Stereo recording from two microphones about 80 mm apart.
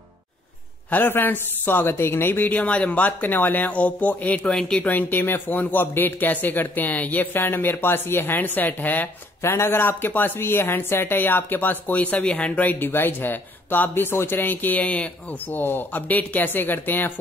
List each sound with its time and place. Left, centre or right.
0.8 s speech: left